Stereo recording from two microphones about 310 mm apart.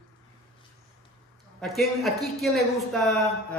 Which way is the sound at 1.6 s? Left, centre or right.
Centre.